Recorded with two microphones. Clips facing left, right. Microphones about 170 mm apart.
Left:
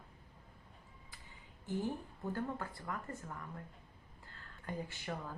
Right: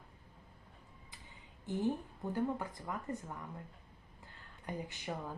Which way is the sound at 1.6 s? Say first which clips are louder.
Right 3 dB; 20° right (ahead or behind).